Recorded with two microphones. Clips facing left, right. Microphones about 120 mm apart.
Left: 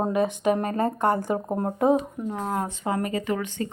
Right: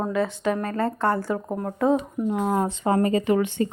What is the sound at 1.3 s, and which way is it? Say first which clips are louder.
Speech: left 2 dB; 30° left (ahead or behind).